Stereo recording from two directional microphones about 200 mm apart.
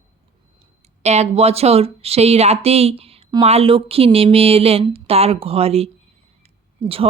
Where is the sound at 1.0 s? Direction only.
35° right (ahead or behind).